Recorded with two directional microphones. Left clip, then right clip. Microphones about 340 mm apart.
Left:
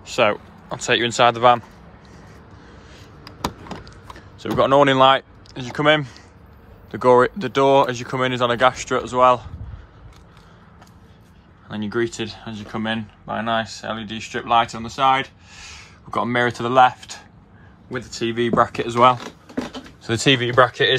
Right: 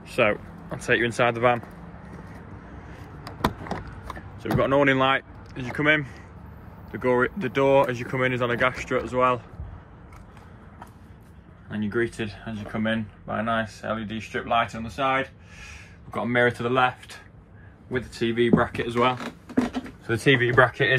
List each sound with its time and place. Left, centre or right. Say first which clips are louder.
0.0 s speech: left 4 dB; centre
4.4 s speech: left 6 dB; centre
11.7 s speech: left 3 dB; centre